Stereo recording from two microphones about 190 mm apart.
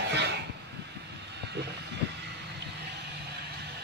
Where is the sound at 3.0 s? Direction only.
60° right (ahead or behind).